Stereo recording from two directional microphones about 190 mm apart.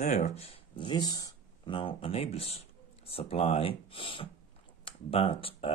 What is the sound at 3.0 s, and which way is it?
Speech, 30° left (ahead or behind).